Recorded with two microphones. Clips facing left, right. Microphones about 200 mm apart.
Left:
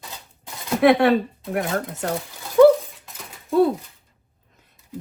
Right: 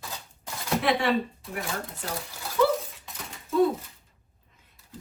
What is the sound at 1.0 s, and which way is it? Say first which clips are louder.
Speech: left 7 dB; 55° left (ahead or behind).